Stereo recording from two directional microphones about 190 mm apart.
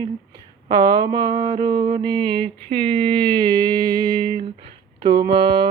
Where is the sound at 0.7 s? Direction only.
20° right (ahead or behind).